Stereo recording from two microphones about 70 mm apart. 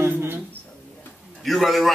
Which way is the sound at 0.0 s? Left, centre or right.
Right.